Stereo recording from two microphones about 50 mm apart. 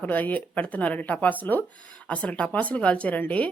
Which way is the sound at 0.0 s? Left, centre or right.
Left.